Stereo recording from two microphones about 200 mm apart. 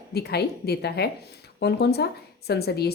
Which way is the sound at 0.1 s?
55° left (ahead or behind).